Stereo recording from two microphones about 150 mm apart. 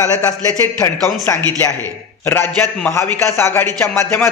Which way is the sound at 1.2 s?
10° left (ahead or behind).